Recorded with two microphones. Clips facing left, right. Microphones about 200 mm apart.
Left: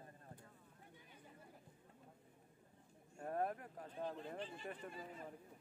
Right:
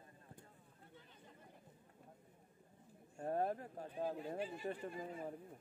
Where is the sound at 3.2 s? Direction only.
30° right (ahead or behind).